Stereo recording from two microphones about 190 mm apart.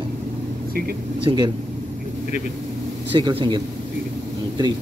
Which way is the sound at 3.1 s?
25° right (ahead or behind).